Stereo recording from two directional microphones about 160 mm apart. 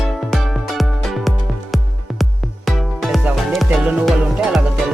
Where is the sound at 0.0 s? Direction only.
Centre (ahead or behind).